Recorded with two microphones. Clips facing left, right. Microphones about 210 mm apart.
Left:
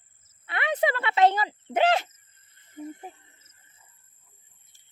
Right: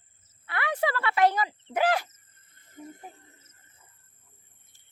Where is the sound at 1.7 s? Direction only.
25° left (ahead or behind).